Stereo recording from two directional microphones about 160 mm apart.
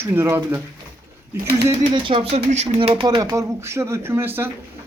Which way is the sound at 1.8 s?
30° right (ahead or behind).